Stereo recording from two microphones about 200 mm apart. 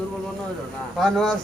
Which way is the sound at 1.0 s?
Centre (ahead or behind).